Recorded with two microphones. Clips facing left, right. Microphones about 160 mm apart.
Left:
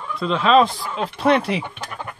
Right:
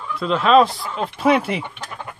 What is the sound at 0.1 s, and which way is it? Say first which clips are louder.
Speech: right 1 dB; centre (ahead or behind).